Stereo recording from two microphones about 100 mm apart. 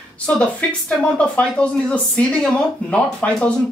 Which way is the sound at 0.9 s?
10° left (ahead or behind).